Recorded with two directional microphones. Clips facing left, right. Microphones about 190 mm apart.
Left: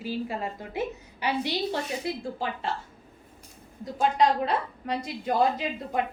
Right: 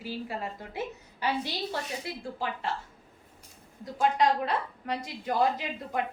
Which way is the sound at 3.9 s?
25° left (ahead or behind).